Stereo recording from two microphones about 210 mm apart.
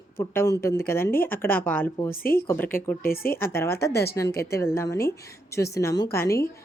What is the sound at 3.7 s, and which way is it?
Speech, 50° left (ahead or behind).